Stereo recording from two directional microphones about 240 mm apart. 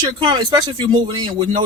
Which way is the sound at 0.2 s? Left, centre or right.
Centre.